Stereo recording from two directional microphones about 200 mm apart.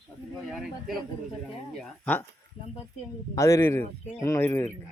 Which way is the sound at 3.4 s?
15° left (ahead or behind).